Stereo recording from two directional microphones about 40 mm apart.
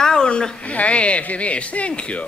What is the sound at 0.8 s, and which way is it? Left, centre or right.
Speech, left.